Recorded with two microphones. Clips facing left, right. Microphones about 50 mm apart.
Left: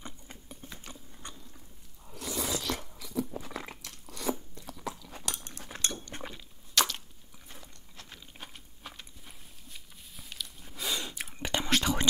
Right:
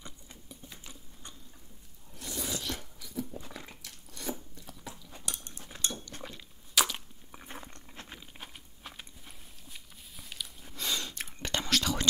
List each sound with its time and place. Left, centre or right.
0.0 s sewing machine: left
2.1 s chewing: left
6.7 s chewing: centre
7.3 s a sound: right
8.4 s a sound: centre
10.7 s whispering: centre